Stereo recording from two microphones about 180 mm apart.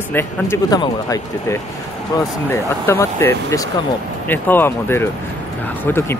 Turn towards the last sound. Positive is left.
turn(degrees=15)  # may be behind; listen again after turning